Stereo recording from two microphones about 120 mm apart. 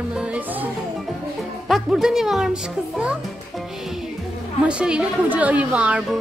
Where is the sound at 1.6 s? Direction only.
Centre (ahead or behind).